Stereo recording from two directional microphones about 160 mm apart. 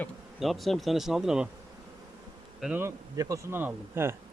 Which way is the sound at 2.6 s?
10° right (ahead or behind).